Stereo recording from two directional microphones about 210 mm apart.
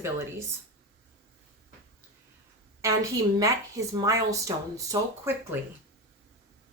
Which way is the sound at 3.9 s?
15° right (ahead or behind).